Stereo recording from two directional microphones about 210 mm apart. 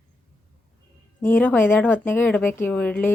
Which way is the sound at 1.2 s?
10° left (ahead or behind).